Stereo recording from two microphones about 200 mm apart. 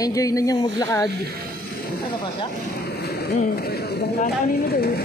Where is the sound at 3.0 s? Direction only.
50° left (ahead or behind).